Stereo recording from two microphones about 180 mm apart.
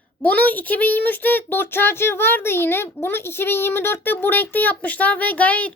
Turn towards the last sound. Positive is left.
turn(degrees=10)  # may be behind; listen again after turning